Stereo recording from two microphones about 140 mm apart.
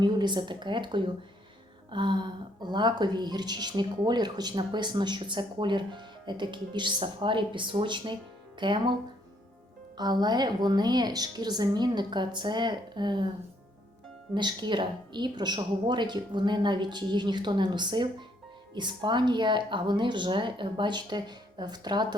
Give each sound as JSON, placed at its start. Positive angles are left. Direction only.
{"t": 0.0, "sound": "speech", "side_deg": -30}
{"t": 10.0, "sound": "speech", "side_deg": -30}
{"t": 14.3, "sound": "speech", "side_deg": -35}